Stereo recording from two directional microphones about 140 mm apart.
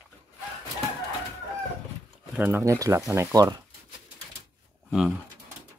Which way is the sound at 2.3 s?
15° right (ahead or behind).